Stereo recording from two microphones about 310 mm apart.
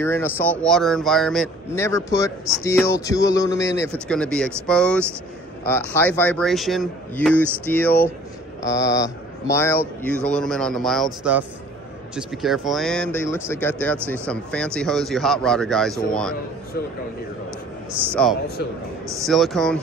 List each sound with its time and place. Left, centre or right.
0.0 s speech: centre
18.1 s speech: centre